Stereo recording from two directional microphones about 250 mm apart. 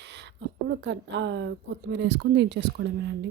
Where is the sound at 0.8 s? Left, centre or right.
Right.